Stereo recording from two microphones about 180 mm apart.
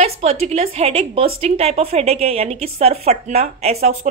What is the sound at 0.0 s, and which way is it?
A woman's voice, 35° right (ahead or behind).